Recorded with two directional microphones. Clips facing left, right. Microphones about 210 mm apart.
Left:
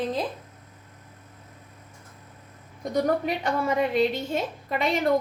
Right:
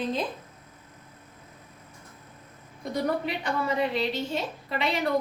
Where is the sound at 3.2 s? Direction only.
45° left (ahead or behind).